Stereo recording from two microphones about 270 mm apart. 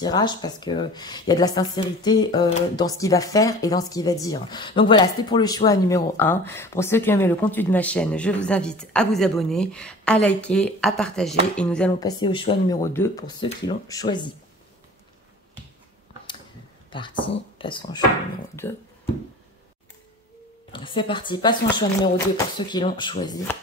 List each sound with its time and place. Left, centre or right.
0.0 s speech: centre
12.0 s speech: centre
17.2 s speech: centre
20.7 s speech: centre
22.7 s speech: centre